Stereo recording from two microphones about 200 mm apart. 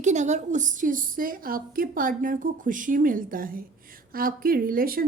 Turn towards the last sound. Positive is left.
turn(degrees=-45)  # may be behind; listen again after turning